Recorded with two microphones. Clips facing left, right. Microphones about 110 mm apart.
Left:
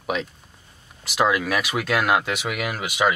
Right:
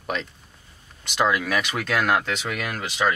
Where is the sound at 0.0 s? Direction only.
5° left (ahead or behind).